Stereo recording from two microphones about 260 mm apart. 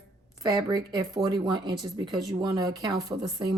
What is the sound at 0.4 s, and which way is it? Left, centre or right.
Speech, centre.